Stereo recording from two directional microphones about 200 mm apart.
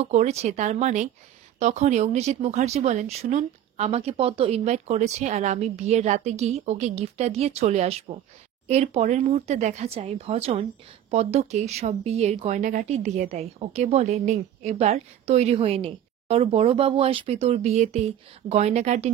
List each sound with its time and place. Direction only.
0.0 s speech: 35° right (ahead or behind)